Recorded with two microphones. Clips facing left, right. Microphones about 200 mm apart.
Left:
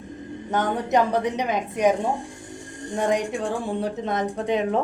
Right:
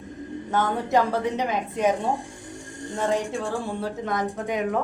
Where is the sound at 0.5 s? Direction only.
20° left (ahead or behind).